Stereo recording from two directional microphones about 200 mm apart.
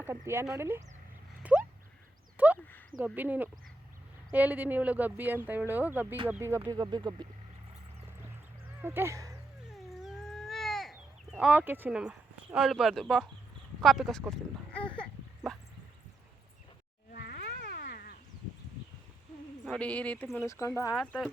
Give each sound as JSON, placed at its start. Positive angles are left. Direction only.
{"t": 0.0, "sound": "speech", "side_deg": -10}
{"t": 1.4, "sound": "a sound", "side_deg": -5}
{"t": 3.0, "sound": "speech", "side_deg": -10}
{"t": 8.8, "sound": "speech", "side_deg": -10}
{"t": 9.6, "sound": "cat", "side_deg": 0}
{"t": 12.5, "sound": "speech", "side_deg": 0}
{"t": 13.8, "sound": "a sound", "side_deg": 0}
{"t": 17.1, "sound": "cat", "side_deg": 50}
{"t": 19.6, "sound": "speech", "side_deg": 5}
{"t": 20.9, "sound": "speech", "side_deg": 5}